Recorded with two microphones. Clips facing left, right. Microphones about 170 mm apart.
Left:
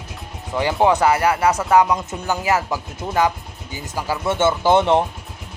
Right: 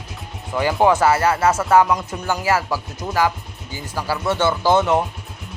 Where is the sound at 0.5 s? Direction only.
20° left (ahead or behind).